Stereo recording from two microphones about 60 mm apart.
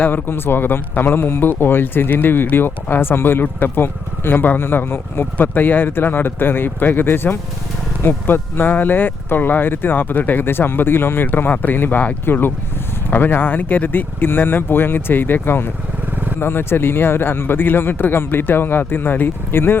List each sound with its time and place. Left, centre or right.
0.0 s speech: left